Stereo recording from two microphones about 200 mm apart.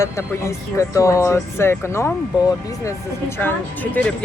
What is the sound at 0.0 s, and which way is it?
Speech, 15° left (ahead or behind).